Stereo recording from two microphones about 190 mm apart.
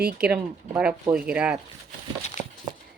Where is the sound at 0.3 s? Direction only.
5° right (ahead or behind).